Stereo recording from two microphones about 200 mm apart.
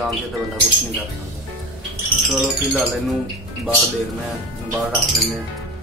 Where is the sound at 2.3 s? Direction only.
Centre (ahead or behind).